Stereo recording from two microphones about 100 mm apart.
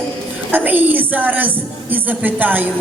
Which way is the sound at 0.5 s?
20° right (ahead or behind).